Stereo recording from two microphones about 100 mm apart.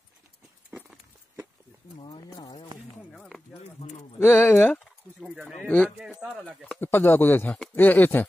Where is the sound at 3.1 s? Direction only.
5° left (ahead or behind).